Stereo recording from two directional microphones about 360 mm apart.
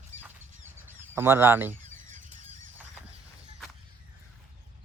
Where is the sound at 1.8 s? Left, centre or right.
Right.